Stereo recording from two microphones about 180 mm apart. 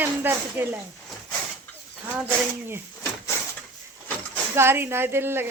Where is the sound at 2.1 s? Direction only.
10° right (ahead or behind).